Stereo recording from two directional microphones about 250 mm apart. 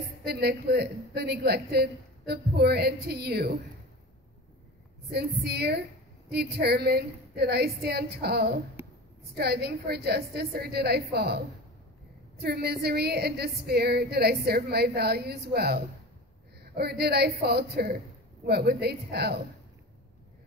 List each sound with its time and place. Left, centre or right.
0.2 s a woman's voice: right
5.1 s a woman's voice: right